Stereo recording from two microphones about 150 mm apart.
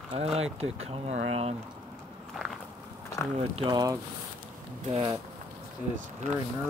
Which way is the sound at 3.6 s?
30° right (ahead or behind).